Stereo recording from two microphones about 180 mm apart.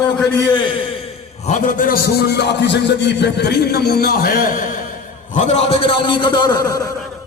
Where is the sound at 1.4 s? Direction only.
45° left (ahead or behind).